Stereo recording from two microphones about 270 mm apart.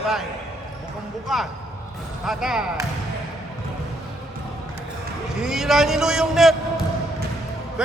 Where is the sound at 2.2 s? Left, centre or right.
Centre.